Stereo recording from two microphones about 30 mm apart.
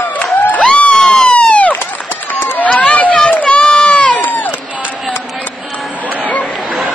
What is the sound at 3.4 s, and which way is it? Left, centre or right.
Baby cry, left.